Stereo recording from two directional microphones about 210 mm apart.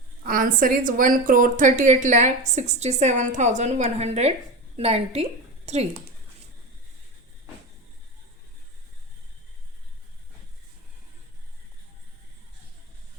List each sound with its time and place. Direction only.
0.3 s a woman's voice: 40° right (ahead or behind)